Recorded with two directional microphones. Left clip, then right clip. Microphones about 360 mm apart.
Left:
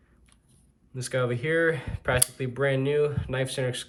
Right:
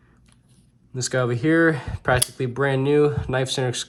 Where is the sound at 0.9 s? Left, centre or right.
Centre.